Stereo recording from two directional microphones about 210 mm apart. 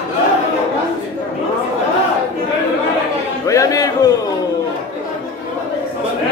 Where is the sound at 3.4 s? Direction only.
15° left (ahead or behind).